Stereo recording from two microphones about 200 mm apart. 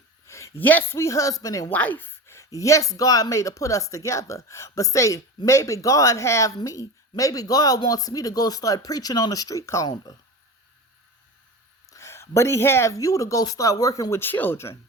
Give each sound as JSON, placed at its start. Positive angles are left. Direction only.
{"t": 0.3, "sound": "a woman's voice", "side_deg": 15}
{"t": 11.9, "sound": "a woman's voice", "side_deg": 15}